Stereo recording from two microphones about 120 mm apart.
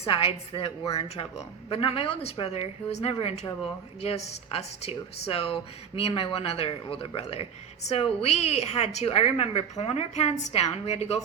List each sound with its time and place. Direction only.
0.0 s a woman's voice: 50° left (ahead or behind)